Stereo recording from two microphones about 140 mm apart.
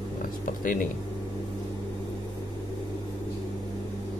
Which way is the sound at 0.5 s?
70° left (ahead or behind).